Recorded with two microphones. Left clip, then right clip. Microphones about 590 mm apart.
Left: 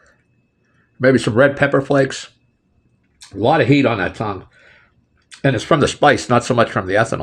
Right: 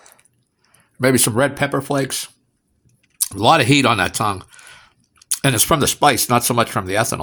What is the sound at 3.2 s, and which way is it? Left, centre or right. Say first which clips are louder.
Speech: right 1 dB; right.